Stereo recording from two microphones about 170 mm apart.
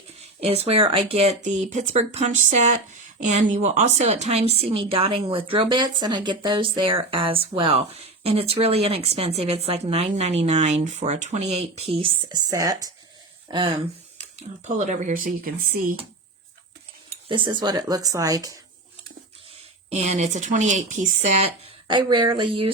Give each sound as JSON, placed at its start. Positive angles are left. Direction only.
{"t": 0.2, "sound": "speech", "side_deg": -35}
{"t": 12.5, "sound": "speech", "side_deg": -20}
{"t": 14.2, "sound": "speech", "side_deg": -45}
{"t": 17.2, "sound": "speech", "side_deg": -30}
{"t": 19.9, "sound": "speech", "side_deg": -40}
{"t": 21.8, "sound": "speech", "side_deg": -25}